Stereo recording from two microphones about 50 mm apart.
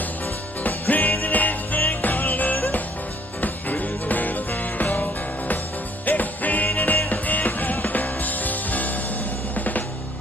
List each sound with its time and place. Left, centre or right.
0.7 s music: left
9.6 s drum kit: left